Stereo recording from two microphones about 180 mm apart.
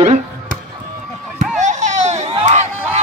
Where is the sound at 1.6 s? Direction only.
40° right (ahead or behind).